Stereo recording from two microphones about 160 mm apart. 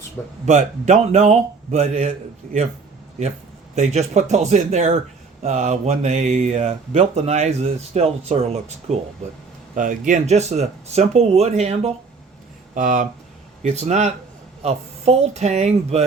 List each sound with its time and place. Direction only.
0.4 s speech: 50° right (ahead or behind)
3.8 s speech: 45° right (ahead or behind)
9.7 s speech: 55° right (ahead or behind)
12.7 s speech: 55° right (ahead or behind)